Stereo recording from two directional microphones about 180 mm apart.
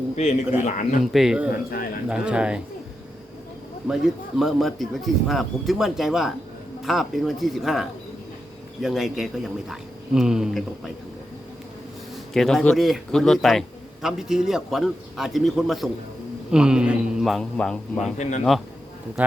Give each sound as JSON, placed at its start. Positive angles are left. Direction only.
{"t": 0.2, "sound": "a man's voice", "side_deg": 40}
{"t": 1.0, "sound": "a man's voice", "side_deg": 0}
{"t": 3.8, "sound": "a man's voice", "side_deg": 0}
{"t": 12.3, "sound": "a man's voice", "side_deg": 0}
{"t": 18.2, "sound": "a man's voice", "side_deg": 40}